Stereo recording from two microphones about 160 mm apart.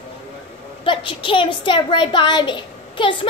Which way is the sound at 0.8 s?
30° left (ahead or behind).